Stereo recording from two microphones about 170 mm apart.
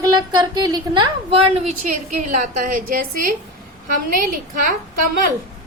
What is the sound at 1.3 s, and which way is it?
Speech, 35° right (ahead or behind).